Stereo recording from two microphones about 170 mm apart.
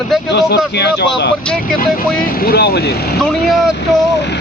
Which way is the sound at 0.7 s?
80° left.